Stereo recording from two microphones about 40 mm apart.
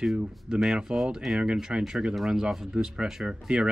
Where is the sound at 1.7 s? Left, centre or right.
Right.